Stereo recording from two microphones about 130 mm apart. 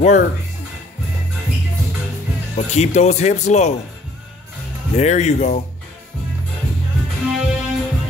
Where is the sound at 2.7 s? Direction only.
60° left (ahead or behind).